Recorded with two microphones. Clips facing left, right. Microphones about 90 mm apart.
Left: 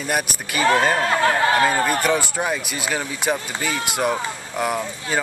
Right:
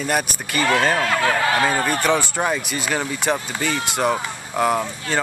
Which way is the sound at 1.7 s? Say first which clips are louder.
Even; 5° left (ahead or behind).